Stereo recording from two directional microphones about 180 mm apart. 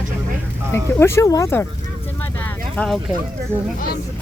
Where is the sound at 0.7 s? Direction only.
15° left (ahead or behind).